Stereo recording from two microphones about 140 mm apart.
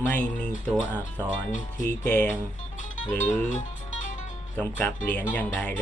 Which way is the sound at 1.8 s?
10° left (ahead or behind).